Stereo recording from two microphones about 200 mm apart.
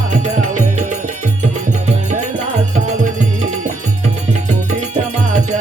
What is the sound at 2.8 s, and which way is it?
Music, 40° right (ahead or behind).